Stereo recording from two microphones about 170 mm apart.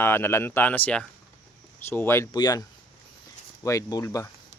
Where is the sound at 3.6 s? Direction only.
20° left (ahead or behind).